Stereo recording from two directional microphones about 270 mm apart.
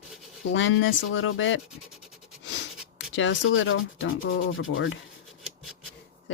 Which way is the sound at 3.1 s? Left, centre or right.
Left.